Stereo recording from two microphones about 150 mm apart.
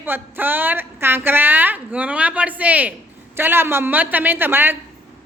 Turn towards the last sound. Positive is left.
turn(degrees=-15)  # may be behind; listen again after turning